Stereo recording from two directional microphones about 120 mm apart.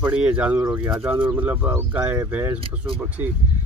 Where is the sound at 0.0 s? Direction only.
10° right (ahead or behind).